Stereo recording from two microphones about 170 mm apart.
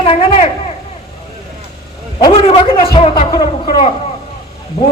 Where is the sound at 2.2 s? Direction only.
30° left (ahead or behind).